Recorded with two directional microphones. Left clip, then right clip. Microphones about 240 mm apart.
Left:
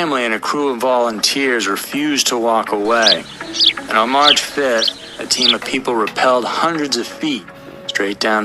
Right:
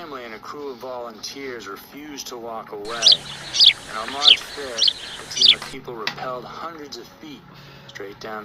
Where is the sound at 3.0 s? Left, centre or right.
Centre.